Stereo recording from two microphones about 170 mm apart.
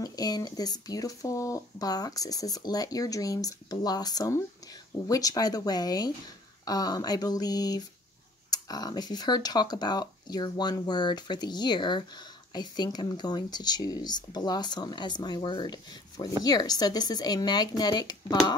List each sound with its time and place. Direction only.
0.0 s speech: 20° left (ahead or behind)